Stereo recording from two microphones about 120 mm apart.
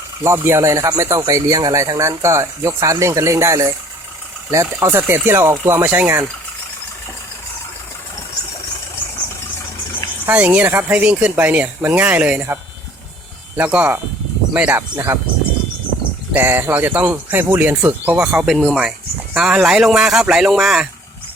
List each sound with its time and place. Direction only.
0.2 s speech: 20° right (ahead or behind)
10.2 s speech: 10° right (ahead or behind)
13.6 s speech: 10° right (ahead or behind)
16.3 s speech: 15° right (ahead or behind); by 20.8 s centre (ahead or behind)